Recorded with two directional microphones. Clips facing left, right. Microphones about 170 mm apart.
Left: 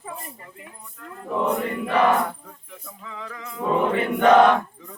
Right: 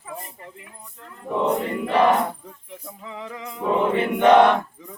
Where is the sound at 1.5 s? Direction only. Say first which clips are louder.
Right 2 dB; 25° right (ahead or behind).